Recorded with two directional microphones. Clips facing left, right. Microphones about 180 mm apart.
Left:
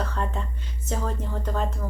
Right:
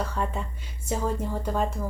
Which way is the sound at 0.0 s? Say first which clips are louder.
Even; 10° right (ahead or behind).